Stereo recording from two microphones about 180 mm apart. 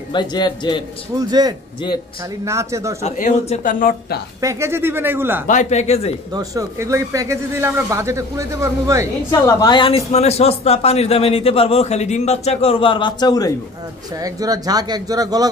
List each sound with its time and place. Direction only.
0.1 s a man's voice: 25° left (ahead or behind)
1.1 s a man's voice: 20° right (ahead or behind)
3.0 s a woman's voice: 40° left (ahead or behind)
4.4 s speech: 15° right (ahead or behind)
5.5 s a woman's voice: 40° left (ahead or behind)
6.3 s speech: 20° right (ahead or behind)
9.3 s a woman's voice: 20° left (ahead or behind)
14.2 s a man's voice: 20° right (ahead or behind)